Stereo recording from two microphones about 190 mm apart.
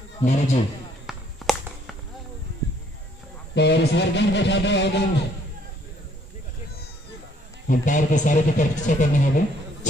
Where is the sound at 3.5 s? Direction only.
65° left (ahead or behind).